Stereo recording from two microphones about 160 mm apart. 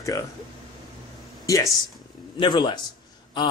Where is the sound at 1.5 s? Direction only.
20° left (ahead or behind).